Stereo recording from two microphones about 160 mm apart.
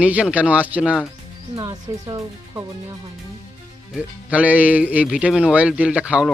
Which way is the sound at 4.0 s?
10° right (ahead or behind).